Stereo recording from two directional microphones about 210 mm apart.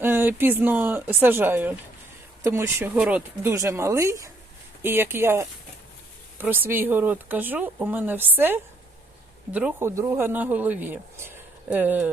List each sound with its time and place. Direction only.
0.0 s speech: 10° right (ahead or behind)